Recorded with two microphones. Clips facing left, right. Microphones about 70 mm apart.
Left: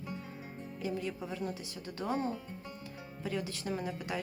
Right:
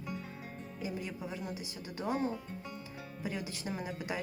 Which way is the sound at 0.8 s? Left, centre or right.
Centre.